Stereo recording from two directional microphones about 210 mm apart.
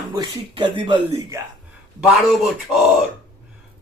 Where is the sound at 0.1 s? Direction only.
20° right (ahead or behind).